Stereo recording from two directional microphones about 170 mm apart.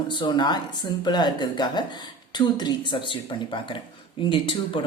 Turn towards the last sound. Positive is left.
turn(degrees=30)  # may be behind; listen again after turning